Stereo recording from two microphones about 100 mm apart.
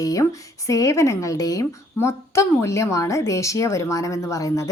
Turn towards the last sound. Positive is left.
turn(degrees=35)  # may be behind; listen again after turning